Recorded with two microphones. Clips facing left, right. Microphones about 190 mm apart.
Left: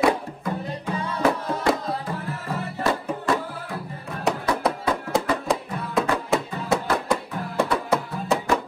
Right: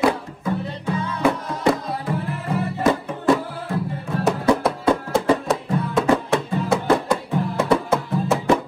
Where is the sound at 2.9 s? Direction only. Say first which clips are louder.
Right 5 dB; 20° right (ahead or behind).